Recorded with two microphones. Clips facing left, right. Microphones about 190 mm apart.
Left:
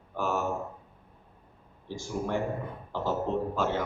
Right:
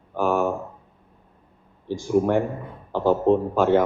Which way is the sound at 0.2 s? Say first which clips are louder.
Right 8 dB; 55° right (ahead or behind).